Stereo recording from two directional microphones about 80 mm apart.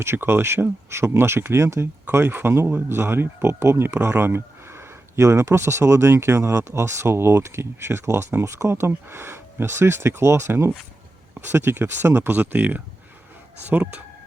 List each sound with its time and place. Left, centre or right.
0.0 s speech: right